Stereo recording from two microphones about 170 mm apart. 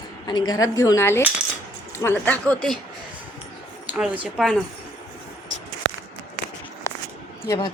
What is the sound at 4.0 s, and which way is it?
Speech, centre (ahead or behind).